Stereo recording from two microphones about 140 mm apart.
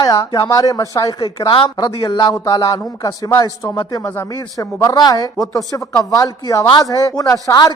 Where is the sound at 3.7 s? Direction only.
40° left (ahead or behind).